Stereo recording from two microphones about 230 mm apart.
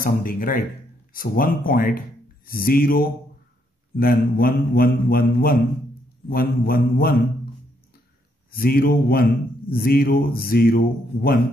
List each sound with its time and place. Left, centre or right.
0.0 s speech: left
8.5 s speech: left